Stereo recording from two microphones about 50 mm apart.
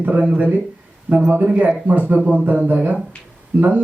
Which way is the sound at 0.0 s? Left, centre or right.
Right.